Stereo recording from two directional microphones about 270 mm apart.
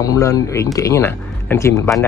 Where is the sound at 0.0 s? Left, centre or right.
Centre.